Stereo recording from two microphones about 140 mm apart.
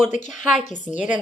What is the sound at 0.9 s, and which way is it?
Speech, 10° right (ahead or behind).